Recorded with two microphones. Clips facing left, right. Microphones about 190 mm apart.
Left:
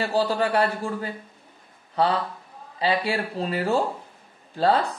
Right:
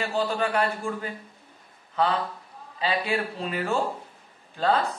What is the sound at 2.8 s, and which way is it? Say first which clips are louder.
A man's voice: left 2 dB; 35° left (ahead or behind).